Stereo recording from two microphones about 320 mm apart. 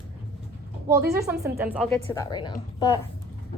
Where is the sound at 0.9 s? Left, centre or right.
Centre.